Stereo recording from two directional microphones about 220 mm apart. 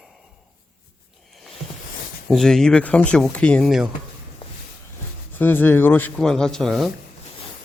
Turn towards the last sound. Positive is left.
turn(degrees=0)  # may be behind; listen again after turning